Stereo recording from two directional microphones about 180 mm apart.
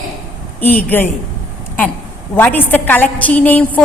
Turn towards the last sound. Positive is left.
turn(degrees=5)  # may be behind; listen again after turning